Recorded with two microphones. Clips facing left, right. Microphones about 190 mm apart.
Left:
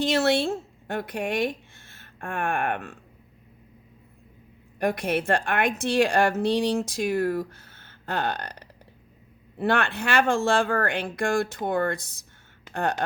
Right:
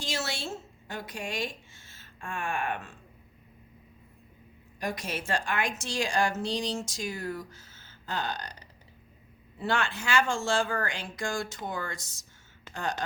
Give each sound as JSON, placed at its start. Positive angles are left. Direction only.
{"t": 0.0, "sound": "a woman's voice", "side_deg": 60}
{"t": 4.8, "sound": "a woman's voice", "side_deg": 60}